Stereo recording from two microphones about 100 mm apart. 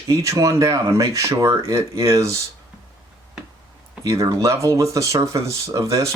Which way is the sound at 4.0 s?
35° right (ahead or behind).